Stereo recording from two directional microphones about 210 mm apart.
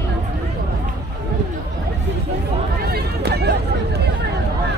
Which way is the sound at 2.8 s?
50° right (ahead or behind).